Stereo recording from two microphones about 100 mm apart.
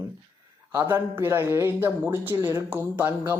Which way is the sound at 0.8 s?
20° right (ahead or behind).